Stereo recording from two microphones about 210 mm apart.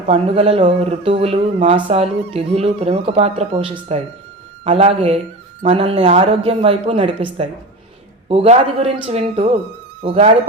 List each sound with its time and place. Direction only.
0.1 s speech: 30° right (ahead or behind)